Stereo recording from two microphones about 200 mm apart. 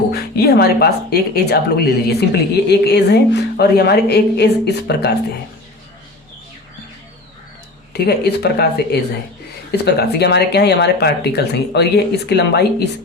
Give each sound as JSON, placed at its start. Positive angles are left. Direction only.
{"t": 0.1, "sound": "speech", "side_deg": 50}
{"t": 7.9, "sound": "speech", "side_deg": 55}